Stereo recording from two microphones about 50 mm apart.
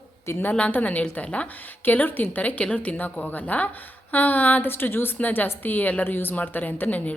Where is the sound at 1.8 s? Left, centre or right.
Left.